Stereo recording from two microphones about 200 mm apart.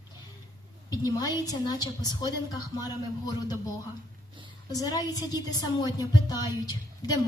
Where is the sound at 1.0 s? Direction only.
20° left (ahead or behind).